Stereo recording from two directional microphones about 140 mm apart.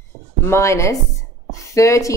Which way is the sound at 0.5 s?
20° left (ahead or behind).